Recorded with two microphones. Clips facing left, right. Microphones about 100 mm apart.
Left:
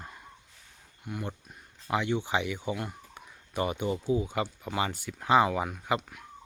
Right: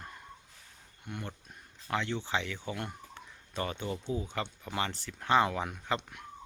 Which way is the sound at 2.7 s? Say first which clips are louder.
Left 4 dB; 5° left (ahead or behind).